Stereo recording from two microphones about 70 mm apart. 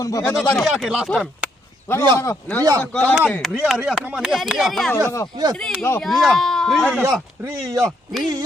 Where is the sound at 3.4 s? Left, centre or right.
Centre.